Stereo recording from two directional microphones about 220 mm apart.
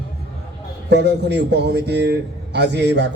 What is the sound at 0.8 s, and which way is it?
A man's voice, 50° right (ahead or behind).